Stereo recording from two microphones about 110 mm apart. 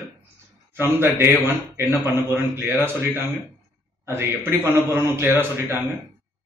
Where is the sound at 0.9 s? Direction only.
20° right (ahead or behind).